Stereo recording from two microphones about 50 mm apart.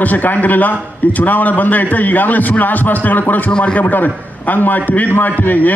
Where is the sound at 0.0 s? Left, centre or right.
Left.